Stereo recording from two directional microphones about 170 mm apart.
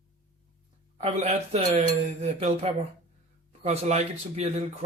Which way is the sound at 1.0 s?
40° right (ahead or behind).